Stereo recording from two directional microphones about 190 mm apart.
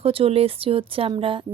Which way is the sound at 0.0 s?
30° right (ahead or behind).